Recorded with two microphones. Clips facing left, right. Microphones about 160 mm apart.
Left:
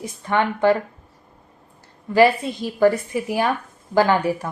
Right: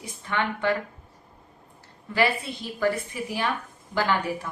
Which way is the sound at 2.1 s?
40° left (ahead or behind).